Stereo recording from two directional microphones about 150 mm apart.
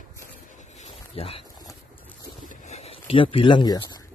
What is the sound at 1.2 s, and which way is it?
Speech, 40° left (ahead or behind).